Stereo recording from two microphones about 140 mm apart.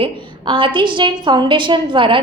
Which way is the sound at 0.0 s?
40° right (ahead or behind).